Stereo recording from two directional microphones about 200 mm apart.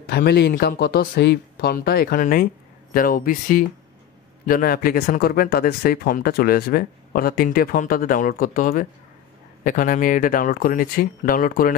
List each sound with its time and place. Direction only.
0.0 s speech: 50° left (ahead or behind)